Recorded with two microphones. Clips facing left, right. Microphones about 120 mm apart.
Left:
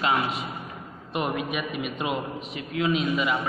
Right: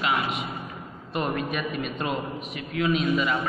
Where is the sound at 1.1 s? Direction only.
15° left (ahead or behind).